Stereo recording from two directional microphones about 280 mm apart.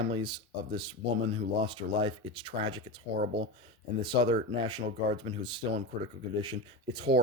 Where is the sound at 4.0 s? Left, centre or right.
Centre.